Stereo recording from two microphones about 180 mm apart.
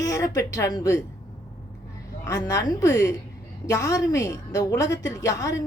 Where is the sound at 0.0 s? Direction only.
20° left (ahead or behind).